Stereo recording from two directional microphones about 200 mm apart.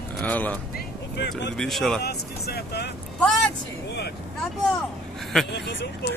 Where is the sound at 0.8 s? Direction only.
60° left (ahead or behind).